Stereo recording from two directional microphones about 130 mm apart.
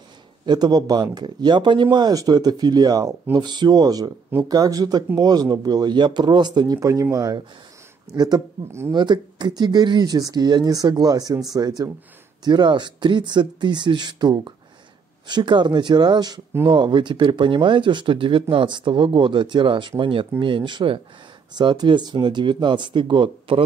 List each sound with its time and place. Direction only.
0.5 s speech: 30° right (ahead or behind)